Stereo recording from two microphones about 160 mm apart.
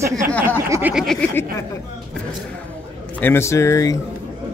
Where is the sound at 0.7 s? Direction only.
10° right (ahead or behind).